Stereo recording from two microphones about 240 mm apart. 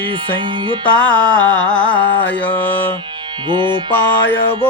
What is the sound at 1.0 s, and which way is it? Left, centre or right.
Music, centre.